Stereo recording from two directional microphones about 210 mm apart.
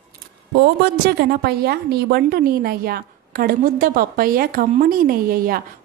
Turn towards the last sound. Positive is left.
turn(degrees=-45)  # may be behind; listen again after turning